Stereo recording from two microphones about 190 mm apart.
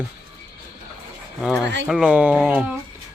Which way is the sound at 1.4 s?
Centre (ahead or behind).